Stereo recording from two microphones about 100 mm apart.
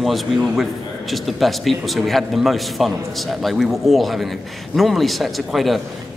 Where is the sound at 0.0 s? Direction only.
Centre (ahead or behind).